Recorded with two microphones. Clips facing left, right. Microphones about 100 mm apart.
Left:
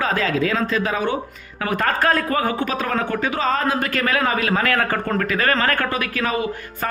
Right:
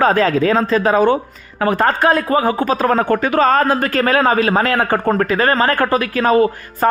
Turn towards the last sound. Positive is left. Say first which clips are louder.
# right 10 dB
turn(degrees=-40)  # may be behind; listen again after turning